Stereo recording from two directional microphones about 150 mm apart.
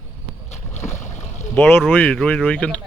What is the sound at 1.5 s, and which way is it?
A man's voice, 15° left (ahead or behind).